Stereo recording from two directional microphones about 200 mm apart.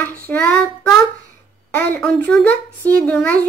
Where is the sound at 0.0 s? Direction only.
10° left (ahead or behind).